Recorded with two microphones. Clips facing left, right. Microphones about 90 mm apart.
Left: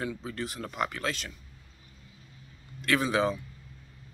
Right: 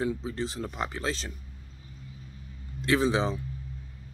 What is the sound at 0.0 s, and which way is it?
Speech, 20° right (ahead or behind).